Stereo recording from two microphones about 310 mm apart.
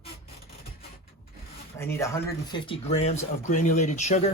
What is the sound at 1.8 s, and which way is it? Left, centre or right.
Speech, centre.